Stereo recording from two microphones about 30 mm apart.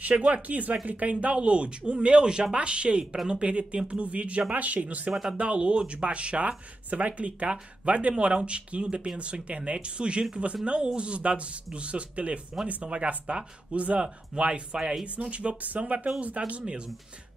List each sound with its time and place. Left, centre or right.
0.1 s speech: right
1.2 s speech: right
5.4 s speech: right
6.9 s speech: right
14.0 s speech: right
15.1 s speech: right